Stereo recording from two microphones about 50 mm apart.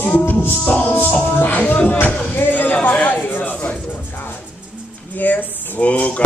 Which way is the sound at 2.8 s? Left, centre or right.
Left.